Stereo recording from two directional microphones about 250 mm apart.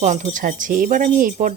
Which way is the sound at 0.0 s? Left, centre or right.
Right.